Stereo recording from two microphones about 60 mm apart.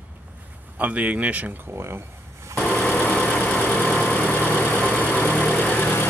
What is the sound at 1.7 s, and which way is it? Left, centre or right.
Speech, right.